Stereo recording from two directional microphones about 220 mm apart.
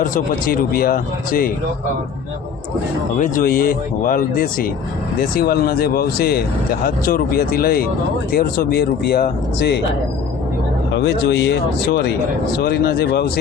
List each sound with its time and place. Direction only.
0.1 s speech: 40° left (ahead or behind)
3.2 s speech: 35° left (ahead or behind)
10.9 s speech: 50° left (ahead or behind)